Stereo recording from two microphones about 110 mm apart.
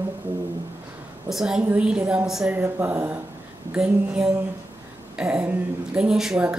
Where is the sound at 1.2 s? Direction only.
5° right (ahead or behind).